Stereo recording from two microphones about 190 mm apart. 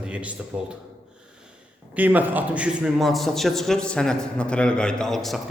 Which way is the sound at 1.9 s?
10° right (ahead or behind).